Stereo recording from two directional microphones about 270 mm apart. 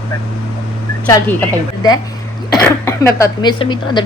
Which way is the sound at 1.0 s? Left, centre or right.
Centre.